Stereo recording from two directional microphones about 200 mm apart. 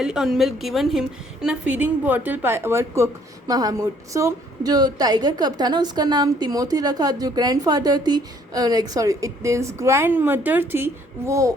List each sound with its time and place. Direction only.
0.0 s a woman's voice: 5° right (ahead or behind)